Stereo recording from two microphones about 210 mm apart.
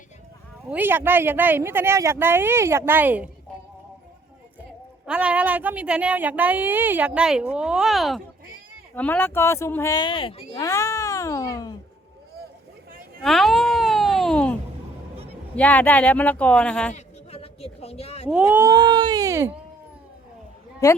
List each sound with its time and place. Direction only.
0.7 s speech: 10° right (ahead or behind)
5.0 s a woman's voice: 5° right (ahead or behind); by 10.4 s 25° left (ahead or behind)
10.5 s cat: 15° left (ahead or behind)
13.2 s a sound: centre (ahead or behind)
15.5 s speech: 10° left (ahead or behind)
16.9 s a sound: 30° left (ahead or behind)
18.3 s speech: 10° right (ahead or behind)